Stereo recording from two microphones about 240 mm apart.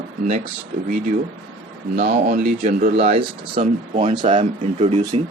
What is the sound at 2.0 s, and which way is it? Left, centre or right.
Speech, right.